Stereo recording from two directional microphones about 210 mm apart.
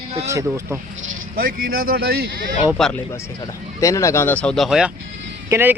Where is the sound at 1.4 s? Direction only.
45° right (ahead or behind).